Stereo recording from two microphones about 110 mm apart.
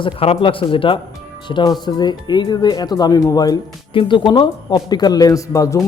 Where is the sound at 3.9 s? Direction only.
45° left (ahead or behind); by 5.8 s 30° left (ahead or behind).